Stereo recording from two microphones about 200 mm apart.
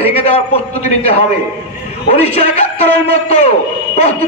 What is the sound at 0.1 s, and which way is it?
Speech, 30° left (ahead or behind).